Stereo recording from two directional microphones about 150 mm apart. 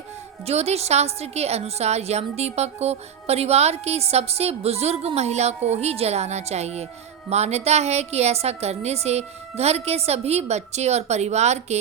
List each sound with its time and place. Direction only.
0.4 s a woman's voice: 45° right (ahead or behind)